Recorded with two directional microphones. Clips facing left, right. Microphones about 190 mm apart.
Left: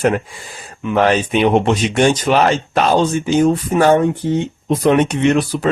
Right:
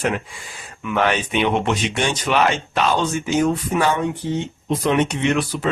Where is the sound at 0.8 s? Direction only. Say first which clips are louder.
Left 6 dB; 35° left (ahead or behind).